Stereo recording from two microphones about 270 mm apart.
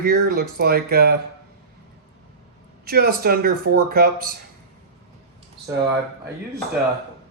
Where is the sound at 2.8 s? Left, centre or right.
Right.